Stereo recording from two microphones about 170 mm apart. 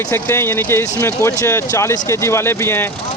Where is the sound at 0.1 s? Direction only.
15° left (ahead or behind).